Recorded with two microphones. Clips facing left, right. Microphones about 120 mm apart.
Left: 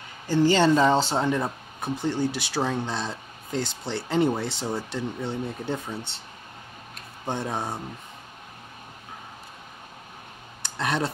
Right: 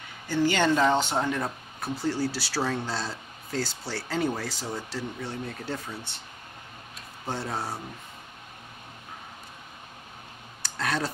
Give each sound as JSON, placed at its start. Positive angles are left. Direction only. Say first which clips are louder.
{"t": 0.5, "sound": "speech", "louder": "left 3 dB", "side_deg": 30}
{"t": 1.2, "sound": "speech", "louder": "left 4 dB", "side_deg": 20}
{"t": 7.2, "sound": "speech", "louder": "left 3 dB", "side_deg": 20}
{"t": 10.6, "sound": "a sound", "louder": "left 3 dB", "side_deg": 20}